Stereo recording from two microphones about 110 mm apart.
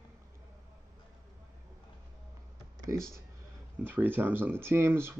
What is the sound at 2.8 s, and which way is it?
Speech, 30° right (ahead or behind).